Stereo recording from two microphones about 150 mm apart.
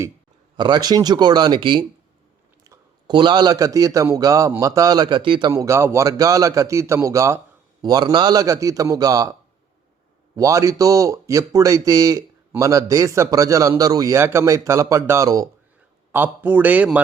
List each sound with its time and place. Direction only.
0.5 s speech: 30° right (ahead or behind)
5.5 s speech: 20° right (ahead or behind)
10.3 s speech: 20° right (ahead or behind)